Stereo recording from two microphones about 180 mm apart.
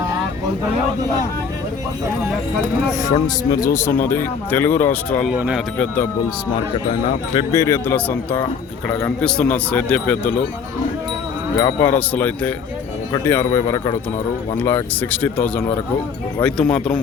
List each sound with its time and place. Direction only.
3.2 s speech: 20° left (ahead or behind)
5.3 s speech: 5° right (ahead or behind)
7.3 s speech: 20° left (ahead or behind)
11.6 s speech: 15° left (ahead or behind)